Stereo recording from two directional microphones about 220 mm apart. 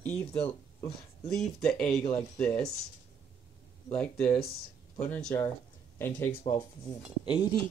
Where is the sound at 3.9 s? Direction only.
5° left (ahead or behind).